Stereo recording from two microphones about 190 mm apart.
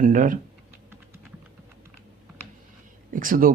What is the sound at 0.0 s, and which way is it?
Speech, 45° right (ahead or behind).